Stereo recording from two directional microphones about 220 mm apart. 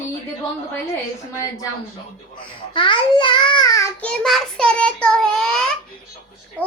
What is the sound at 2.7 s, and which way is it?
A child's voice, 20° left (ahead or behind).